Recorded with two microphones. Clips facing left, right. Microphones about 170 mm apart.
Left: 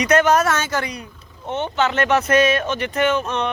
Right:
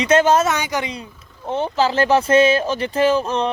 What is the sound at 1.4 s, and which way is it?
Speech, 30° right (ahead or behind).